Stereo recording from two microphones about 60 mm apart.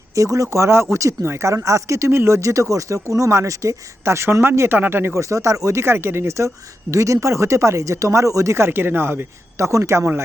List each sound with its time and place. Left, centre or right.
0.1 s speech: right
5.1 s speech: right
5.8 s speech: right